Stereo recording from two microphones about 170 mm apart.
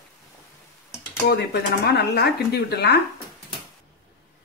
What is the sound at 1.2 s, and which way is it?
Speech, 70° left (ahead or behind).